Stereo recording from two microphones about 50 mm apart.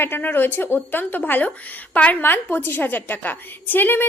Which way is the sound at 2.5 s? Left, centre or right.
Left.